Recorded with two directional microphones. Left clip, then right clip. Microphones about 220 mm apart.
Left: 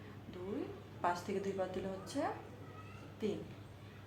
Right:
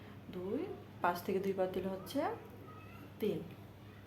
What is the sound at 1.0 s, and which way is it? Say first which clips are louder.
Speech: right 2 dB; 45° right (ahead or behind).